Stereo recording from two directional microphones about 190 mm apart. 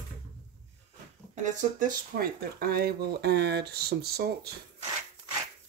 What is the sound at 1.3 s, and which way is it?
Speech, 40° right (ahead or behind).